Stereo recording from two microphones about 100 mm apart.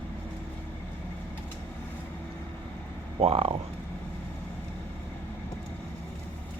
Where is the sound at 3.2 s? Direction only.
80° right.